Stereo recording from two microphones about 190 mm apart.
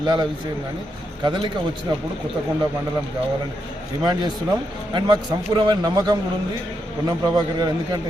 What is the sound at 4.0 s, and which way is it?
A man's voice, 25° right (ahead or behind).